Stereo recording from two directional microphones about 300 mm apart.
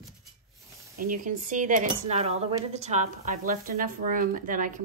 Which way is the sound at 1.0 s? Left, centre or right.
Right.